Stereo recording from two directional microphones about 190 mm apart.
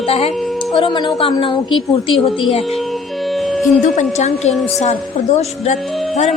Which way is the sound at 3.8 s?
40° left (ahead or behind).